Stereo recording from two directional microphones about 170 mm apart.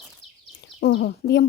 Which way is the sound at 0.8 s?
90° left.